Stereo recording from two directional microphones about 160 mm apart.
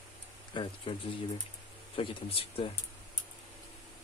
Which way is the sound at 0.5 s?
30° left (ahead or behind).